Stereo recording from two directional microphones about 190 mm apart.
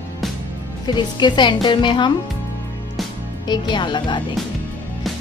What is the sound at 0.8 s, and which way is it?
A woman's voice, 25° left (ahead or behind).